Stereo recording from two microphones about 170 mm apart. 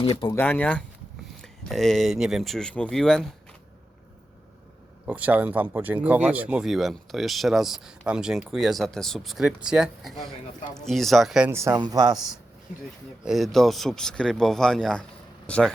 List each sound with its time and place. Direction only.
0.0 s speech: 30° left (ahead or behind)
0.3 s speech: 10° left (ahead or behind)
5.0 s speech: 10° right (ahead or behind)
11.5 s speech: 15° right (ahead or behind)
13.2 s speech: centre (ahead or behind)